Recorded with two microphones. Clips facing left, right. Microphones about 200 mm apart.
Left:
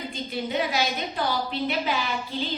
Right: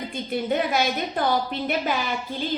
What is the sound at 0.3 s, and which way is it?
A woman's voice, 50° right (ahead or behind).